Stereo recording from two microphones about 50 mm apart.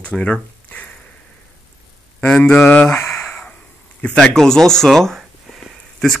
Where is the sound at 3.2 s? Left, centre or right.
Left.